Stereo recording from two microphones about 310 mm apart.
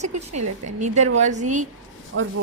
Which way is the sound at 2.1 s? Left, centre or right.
Right.